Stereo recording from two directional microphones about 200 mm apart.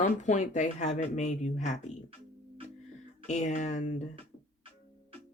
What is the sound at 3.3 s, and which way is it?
Speech, 35° left (ahead or behind).